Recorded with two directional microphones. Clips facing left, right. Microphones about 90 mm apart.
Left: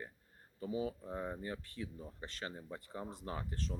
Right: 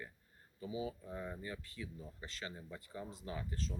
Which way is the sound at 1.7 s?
50° left (ahead or behind).